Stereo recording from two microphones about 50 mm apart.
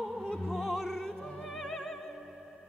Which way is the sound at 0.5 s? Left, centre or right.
Centre.